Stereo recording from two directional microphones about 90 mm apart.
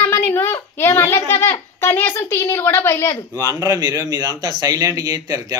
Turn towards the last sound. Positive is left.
turn(degrees=-40)  # may be behind; listen again after turning